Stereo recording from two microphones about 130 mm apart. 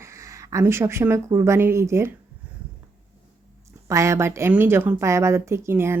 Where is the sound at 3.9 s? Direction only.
25° right (ahead or behind).